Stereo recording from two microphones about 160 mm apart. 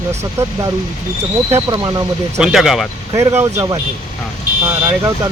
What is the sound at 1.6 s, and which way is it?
Speech, 25° right (ahead or behind).